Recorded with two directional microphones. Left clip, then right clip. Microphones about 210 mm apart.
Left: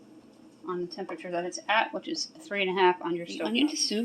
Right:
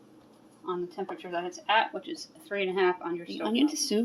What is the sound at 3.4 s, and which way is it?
Speech, 5° right (ahead or behind).